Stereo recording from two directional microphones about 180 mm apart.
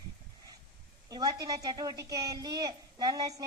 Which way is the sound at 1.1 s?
20° right (ahead or behind).